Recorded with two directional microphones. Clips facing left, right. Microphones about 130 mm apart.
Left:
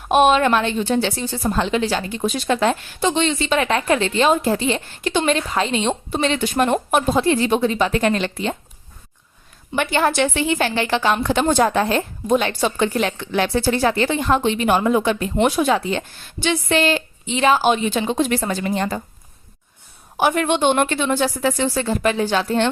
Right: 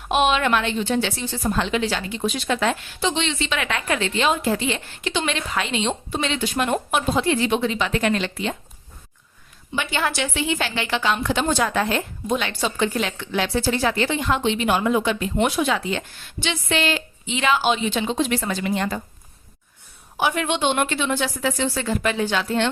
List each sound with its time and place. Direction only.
0.1 s a woman's voice: 40° left (ahead or behind)
9.7 s a woman's voice: 50° left (ahead or behind)
20.1 s a woman's voice: 50° left (ahead or behind)